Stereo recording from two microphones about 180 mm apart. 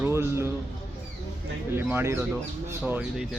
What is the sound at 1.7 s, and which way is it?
Speech, 15° right (ahead or behind).